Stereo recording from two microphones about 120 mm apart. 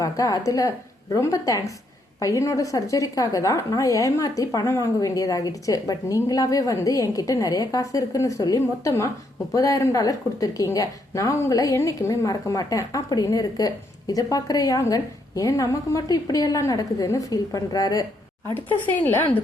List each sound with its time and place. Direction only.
0.0 s a woman's voice: 30° left (ahead or behind)
18.5 s speech: 15° left (ahead or behind)